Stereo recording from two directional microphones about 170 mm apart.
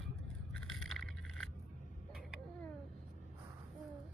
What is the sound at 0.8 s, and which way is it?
Vehicle, centre (ahead or behind).